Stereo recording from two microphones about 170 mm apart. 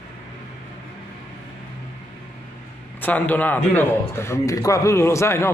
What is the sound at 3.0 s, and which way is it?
A man's voice, 10° left (ahead or behind).